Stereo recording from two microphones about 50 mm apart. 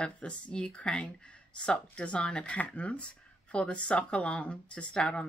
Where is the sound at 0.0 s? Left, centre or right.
Centre.